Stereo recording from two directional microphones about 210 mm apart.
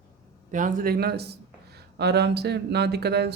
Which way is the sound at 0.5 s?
40° right (ahead or behind).